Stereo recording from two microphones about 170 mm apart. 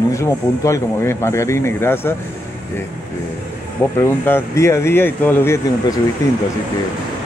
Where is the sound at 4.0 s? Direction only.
15° left (ahead or behind).